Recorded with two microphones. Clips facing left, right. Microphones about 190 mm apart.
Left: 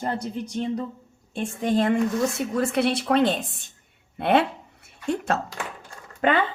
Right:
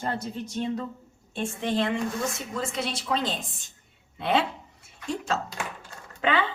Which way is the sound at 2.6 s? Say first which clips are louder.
Left 9 dB; 65° left (ahead or behind).